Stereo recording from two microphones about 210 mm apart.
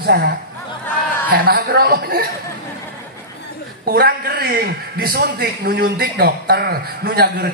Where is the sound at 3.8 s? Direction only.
45° right (ahead or behind).